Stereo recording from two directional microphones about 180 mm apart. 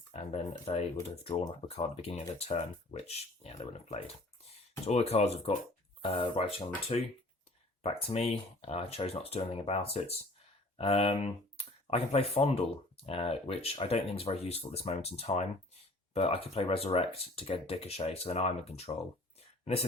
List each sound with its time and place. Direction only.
0.1 s speech: 35° left (ahead or behind)